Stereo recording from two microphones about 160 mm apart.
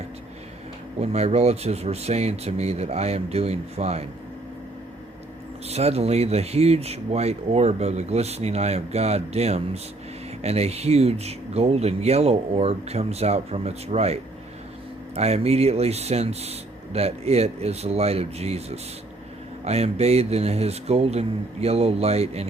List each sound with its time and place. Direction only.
1.0 s speech: 40° right (ahead or behind)
5.6 s speech: 40° right (ahead or behind)